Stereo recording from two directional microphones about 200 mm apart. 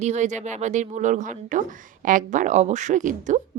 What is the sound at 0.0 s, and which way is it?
Speech, 35° right (ahead or behind).